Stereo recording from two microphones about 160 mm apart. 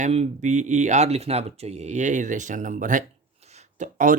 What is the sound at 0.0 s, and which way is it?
Speech, 45° right (ahead or behind).